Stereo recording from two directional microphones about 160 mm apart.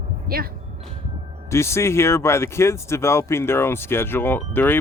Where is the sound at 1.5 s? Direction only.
15° left (ahead or behind).